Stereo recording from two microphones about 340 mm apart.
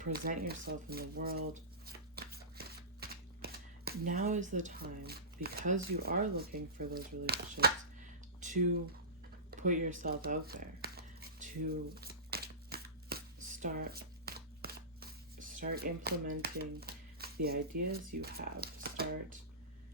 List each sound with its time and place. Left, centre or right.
0.0 s speech: right
1.9 s shuffling cards: right
8.4 s a sound: right
18.2 s speech: right